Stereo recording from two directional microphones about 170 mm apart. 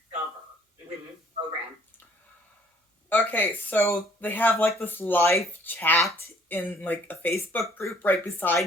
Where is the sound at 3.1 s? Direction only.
10° left (ahead or behind).